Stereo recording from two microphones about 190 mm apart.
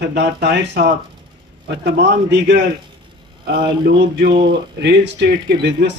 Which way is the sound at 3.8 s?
55° right (ahead or behind).